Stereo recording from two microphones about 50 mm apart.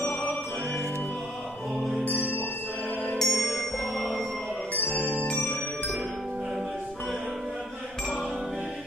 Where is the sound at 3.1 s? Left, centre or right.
Centre.